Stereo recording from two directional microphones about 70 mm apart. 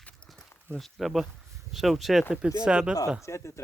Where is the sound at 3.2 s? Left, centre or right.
Left.